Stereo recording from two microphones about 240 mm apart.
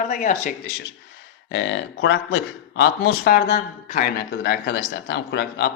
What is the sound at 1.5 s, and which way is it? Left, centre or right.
A man's voice, left.